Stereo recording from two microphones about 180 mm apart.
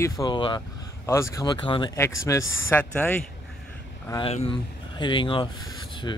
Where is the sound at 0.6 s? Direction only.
15° left (ahead or behind).